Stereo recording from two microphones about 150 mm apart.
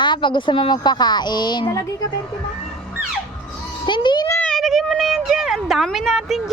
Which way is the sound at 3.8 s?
30° left (ahead or behind).